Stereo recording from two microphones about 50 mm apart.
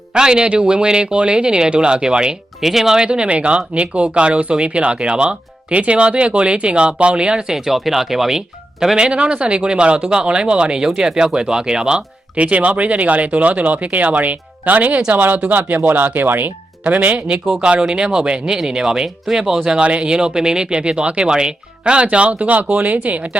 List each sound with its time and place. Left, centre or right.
0.1 s speech: centre
3.1 s speech: right; by 8.4 s centre
9.0 s speech: centre; by 16.5 s right
16.8 s speech: right
17.5 s speech: centre